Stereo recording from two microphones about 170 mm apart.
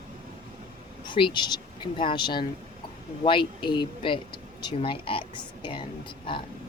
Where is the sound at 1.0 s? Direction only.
30° left (ahead or behind).